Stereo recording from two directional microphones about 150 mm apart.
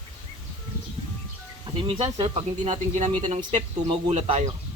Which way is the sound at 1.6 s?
30° right (ahead or behind).